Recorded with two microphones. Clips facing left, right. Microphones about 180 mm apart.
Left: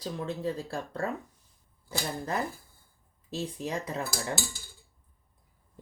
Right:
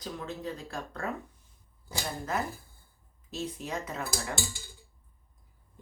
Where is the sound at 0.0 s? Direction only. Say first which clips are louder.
Left 4 dB; 30° left (ahead or behind).